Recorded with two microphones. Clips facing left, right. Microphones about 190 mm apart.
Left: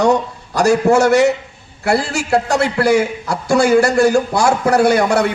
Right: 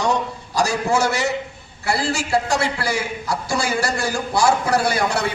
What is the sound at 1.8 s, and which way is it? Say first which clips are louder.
A man's voice: left 5 dB; 60° left (ahead or behind).